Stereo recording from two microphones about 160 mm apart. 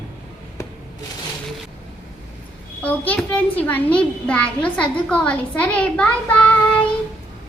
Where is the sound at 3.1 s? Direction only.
10° left (ahead or behind).